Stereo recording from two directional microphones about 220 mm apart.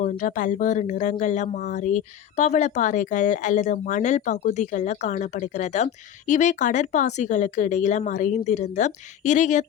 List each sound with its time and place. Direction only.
0.0 s speech: 35° left (ahead or behind)